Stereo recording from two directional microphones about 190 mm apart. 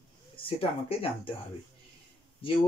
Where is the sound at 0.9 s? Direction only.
30° left (ahead or behind).